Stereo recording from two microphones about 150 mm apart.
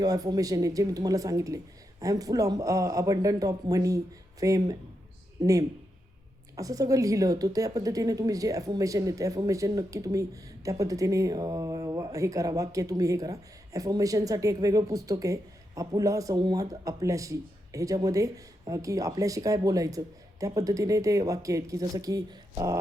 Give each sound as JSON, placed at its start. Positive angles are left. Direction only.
{"t": 0.0, "sound": "a woman's voice", "side_deg": -25}